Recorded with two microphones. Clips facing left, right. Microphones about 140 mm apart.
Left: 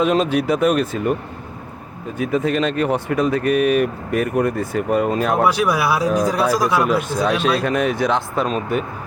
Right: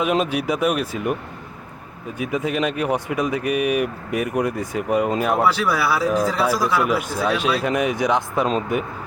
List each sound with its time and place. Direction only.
0.0 s speech: 10° right (ahead or behind)
2.1 s speech: 10° right (ahead or behind)
5.5 s speech: 15° left (ahead or behind)
7.4 s speech: 15° right (ahead or behind)